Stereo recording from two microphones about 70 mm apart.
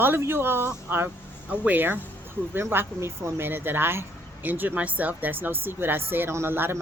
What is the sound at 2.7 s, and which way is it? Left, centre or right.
Speech, right.